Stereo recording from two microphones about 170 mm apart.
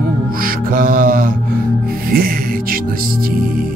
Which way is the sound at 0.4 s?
55° right (ahead or behind).